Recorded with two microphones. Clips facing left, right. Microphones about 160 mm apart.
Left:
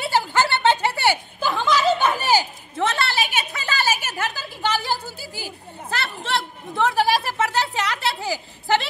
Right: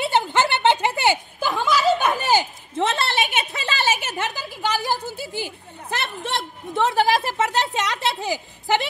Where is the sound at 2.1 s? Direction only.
20° right (ahead or behind).